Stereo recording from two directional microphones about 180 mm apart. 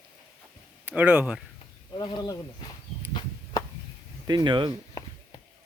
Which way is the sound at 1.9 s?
25° left (ahead or behind).